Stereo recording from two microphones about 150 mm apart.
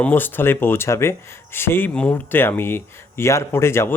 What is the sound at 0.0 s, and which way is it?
Speech, 15° left (ahead or behind).